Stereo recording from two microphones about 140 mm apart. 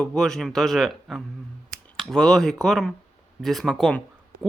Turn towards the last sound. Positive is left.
turn(degrees=0)  # may be behind; listen again after turning